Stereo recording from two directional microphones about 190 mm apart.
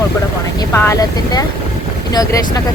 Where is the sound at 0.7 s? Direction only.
15° left (ahead or behind).